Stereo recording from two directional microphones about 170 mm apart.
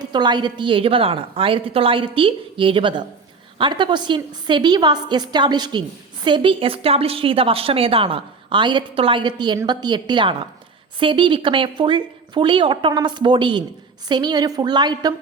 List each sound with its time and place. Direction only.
0.0 s a woman's voice: 25° right (ahead or behind)